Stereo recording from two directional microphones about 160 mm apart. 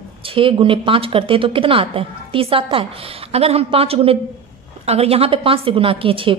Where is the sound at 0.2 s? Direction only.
35° right (ahead or behind).